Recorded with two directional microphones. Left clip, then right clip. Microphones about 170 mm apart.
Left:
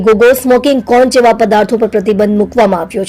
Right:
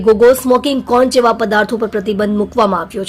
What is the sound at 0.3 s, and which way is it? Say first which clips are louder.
Speech: left 3 dB; 10° left (ahead or behind).